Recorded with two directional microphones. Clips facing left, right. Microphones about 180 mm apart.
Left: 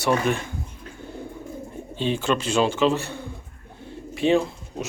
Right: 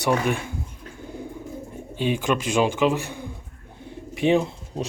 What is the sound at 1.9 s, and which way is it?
A man's voice, 10° right (ahead or behind).